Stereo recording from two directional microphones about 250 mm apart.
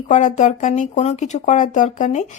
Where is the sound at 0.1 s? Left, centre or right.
Left.